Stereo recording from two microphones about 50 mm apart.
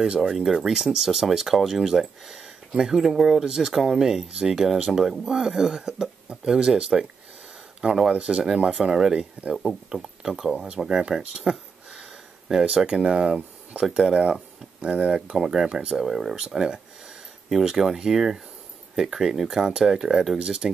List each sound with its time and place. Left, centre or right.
0.0 s speech: centre
8.1 s speech: right
8.7 s speech: centre
15.3 s speech: centre